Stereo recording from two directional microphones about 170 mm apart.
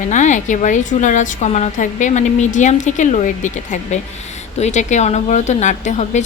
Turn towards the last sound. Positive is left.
turn(degrees=45)  # may be behind; listen again after turning